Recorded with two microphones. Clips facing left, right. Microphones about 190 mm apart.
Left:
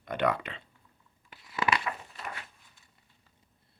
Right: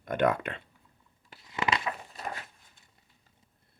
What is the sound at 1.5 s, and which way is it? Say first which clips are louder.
Crumpling: left 1 dB; 25° right (ahead or behind).